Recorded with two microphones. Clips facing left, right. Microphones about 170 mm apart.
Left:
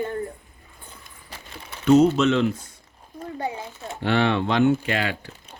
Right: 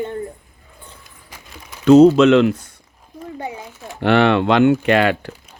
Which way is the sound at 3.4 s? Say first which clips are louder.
Even; 20° right (ahead or behind).